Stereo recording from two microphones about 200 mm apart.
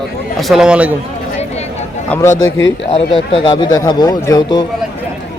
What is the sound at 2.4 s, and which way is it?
Speech, 65° left (ahead or behind).